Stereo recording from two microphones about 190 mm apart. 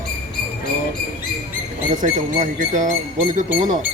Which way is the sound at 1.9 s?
40° right (ahead or behind).